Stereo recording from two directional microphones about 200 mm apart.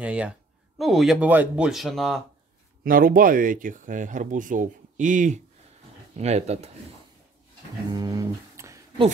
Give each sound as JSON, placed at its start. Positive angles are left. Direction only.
{"t": 0.0, "sound": "speech", "side_deg": -5}
{"t": 2.8, "sound": "speech", "side_deg": -45}
{"t": 7.9, "sound": "a sound", "side_deg": -20}